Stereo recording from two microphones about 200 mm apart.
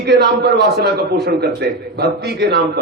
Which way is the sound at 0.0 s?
55° right (ahead or behind).